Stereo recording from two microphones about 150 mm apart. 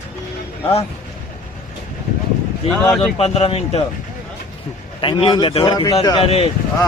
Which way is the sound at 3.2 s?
45° left (ahead or behind).